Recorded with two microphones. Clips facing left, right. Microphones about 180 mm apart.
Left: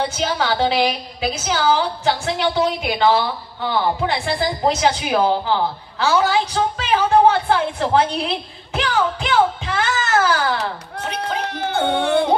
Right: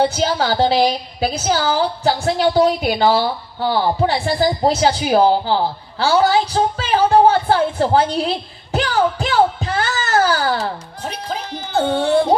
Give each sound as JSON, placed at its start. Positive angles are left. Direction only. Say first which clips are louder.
{"t": 0.0, "sound": "a woman's voice", "louder": "right 4 dB", "side_deg": -35}
{"t": 11.0, "sound": "speech", "louder": "left 6 dB", "side_deg": 65}